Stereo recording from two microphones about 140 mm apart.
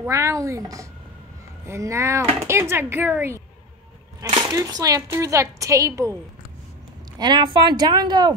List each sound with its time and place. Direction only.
0.0 s speech: 20° right (ahead or behind)
7.2 s a woman's voice: 30° right (ahead or behind)